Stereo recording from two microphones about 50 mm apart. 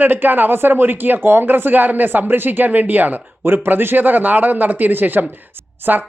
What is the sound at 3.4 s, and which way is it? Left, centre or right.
A man's voice, right.